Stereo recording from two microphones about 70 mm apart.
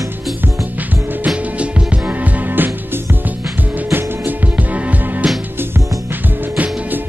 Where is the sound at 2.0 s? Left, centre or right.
Right.